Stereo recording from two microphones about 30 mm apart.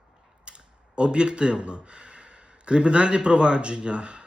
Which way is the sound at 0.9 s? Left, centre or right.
Right.